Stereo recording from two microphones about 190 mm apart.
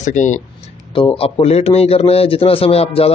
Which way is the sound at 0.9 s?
25° left (ahead or behind).